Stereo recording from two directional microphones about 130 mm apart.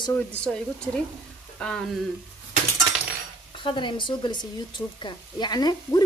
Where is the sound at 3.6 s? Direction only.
40° left (ahead or behind).